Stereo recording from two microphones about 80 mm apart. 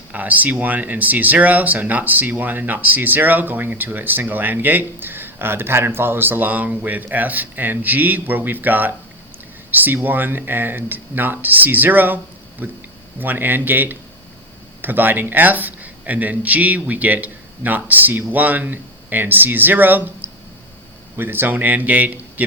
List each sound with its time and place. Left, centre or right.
0.1 s speech: centre